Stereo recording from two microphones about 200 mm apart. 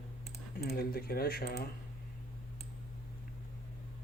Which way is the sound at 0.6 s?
50° left (ahead or behind).